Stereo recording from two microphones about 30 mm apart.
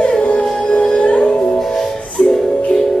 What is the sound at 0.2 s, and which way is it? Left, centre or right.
Music, left.